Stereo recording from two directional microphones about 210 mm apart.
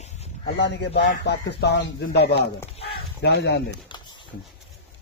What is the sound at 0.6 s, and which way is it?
Speech, 55° left (ahead or behind).